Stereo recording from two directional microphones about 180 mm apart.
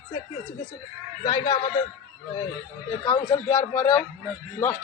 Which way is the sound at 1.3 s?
20° left (ahead or behind).